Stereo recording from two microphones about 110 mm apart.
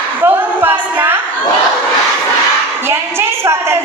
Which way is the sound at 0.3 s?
20° right (ahead or behind).